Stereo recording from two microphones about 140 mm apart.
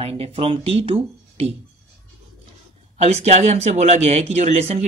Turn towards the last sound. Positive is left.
turn(degrees=-50)  # may be behind; listen again after turning